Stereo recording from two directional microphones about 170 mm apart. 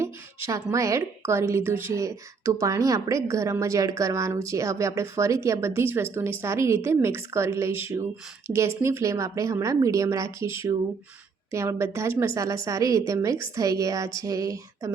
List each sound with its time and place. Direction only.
0.0 s a woman's voice: 15° right (ahead or behind)